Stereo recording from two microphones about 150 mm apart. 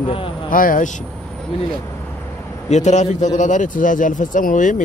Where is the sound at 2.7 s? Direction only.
50° left (ahead or behind).